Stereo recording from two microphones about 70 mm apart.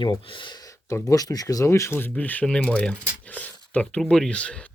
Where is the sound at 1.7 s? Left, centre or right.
Left.